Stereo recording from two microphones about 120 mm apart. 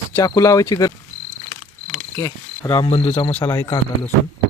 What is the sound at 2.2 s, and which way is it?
Speech, 25° left (ahead or behind).